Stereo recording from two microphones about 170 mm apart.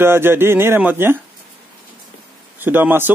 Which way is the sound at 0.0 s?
15° right (ahead or behind).